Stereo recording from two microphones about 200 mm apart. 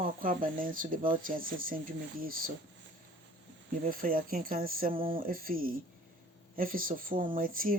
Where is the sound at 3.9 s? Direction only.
45° right (ahead or behind).